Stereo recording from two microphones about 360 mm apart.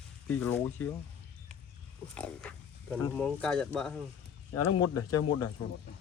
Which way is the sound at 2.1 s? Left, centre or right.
Centre.